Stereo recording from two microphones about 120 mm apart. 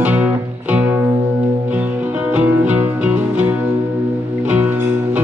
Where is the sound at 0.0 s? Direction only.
15° right (ahead or behind).